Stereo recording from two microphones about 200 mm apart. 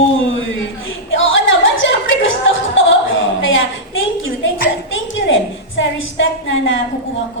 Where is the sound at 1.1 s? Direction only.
70° left (ahead or behind).